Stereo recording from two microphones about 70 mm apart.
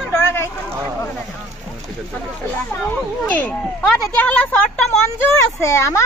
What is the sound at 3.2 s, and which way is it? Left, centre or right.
Speech, centre.